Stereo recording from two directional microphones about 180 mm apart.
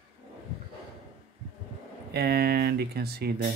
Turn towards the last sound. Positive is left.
turn(degrees=-60)  # may be behind; listen again after turning